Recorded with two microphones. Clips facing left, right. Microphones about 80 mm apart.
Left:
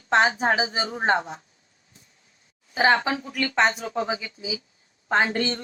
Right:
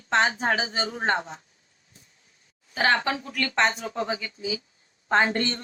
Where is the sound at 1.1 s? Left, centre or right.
Left.